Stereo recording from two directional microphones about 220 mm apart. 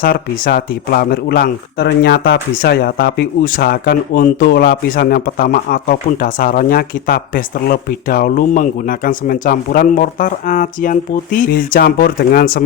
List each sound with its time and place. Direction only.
0.0 s speech: 40° left (ahead or behind)